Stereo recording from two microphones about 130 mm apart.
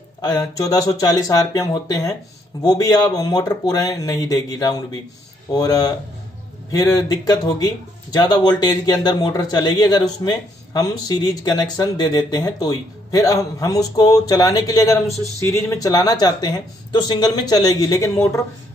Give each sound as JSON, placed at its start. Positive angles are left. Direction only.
{"t": 0.2, "sound": "speech", "side_deg": 30}